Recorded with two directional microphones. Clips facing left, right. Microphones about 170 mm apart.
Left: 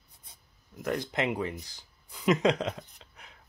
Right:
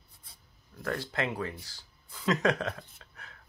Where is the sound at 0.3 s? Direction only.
20° left (ahead or behind).